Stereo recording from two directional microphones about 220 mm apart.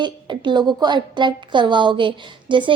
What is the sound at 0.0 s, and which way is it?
A woman's voice, 20° right (ahead or behind).